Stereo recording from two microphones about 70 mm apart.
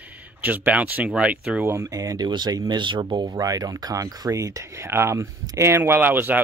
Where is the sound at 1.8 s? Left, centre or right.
Right.